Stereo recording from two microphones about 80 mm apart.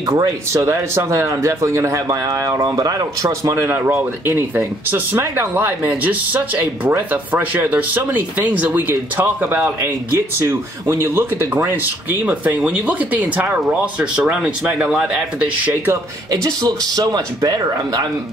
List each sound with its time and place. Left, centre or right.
0.0 s speech: right
0.7 s speech: right
3.3 s speech: right
12.3 s speech: centre
16.3 s speech: right